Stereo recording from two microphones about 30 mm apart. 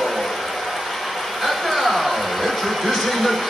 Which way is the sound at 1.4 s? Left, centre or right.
Centre.